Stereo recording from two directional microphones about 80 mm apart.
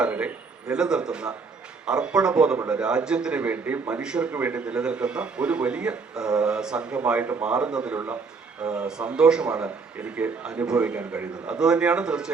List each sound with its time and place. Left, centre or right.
0.0 s a man's voice: centre